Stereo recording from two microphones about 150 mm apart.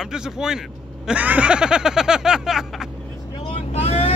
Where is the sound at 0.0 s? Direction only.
5° right (ahead or behind).